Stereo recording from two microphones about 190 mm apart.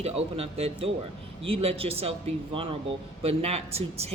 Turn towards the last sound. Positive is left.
turn(degrees=-35)  # may be behind; listen again after turning